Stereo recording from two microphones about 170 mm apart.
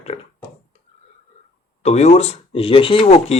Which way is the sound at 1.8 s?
40° left (ahead or behind).